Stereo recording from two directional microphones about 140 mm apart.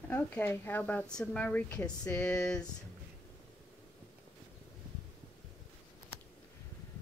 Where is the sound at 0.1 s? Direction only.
15° left (ahead or behind).